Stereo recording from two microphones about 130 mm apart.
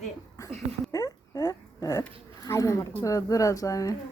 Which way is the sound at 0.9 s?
30° left (ahead or behind).